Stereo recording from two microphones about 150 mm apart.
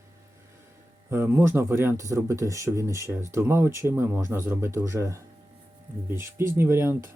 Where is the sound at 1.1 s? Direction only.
15° right (ahead or behind).